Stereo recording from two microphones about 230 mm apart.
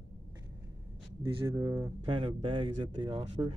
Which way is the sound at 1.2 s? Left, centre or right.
Centre.